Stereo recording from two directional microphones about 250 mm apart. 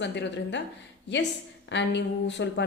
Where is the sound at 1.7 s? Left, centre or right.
Left.